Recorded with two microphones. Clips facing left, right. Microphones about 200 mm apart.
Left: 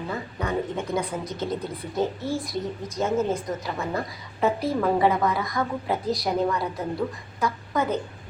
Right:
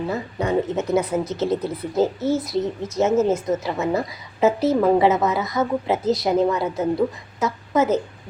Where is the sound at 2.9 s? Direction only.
25° right (ahead or behind).